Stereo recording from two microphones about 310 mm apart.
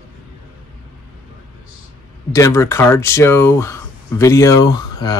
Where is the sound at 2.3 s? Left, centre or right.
Centre.